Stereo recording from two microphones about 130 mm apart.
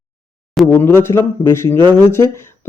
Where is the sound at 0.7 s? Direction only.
20° left (ahead or behind).